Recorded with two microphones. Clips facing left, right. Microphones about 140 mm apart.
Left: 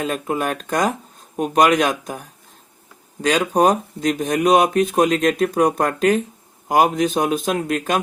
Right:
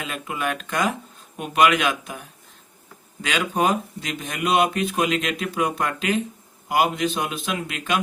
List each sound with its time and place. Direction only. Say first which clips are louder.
0.0 s speech: left 6 dB; 40° left (ahead or behind)